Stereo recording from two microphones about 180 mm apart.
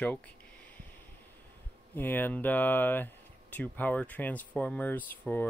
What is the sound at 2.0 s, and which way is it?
Speech, 10° left (ahead or behind).